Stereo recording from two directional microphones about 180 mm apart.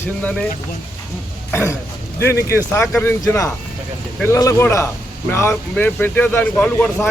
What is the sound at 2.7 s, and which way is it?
Speech, 15° left (ahead or behind).